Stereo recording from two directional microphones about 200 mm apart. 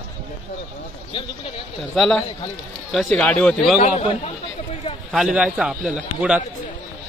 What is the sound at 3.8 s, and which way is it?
Speech, 35° left (ahead or behind).